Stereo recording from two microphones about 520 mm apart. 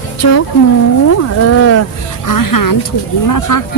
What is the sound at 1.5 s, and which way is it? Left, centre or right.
Speech, left.